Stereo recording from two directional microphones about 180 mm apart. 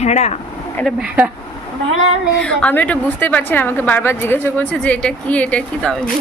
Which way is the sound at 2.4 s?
5° left (ahead or behind).